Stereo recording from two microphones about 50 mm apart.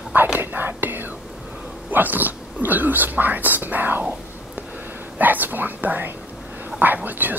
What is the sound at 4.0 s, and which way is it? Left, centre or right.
Whispering, right.